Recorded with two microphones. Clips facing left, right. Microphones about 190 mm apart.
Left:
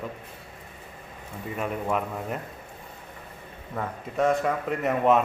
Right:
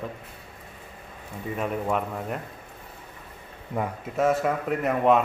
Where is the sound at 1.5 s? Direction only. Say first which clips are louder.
Right 1 dB; centre (ahead or behind).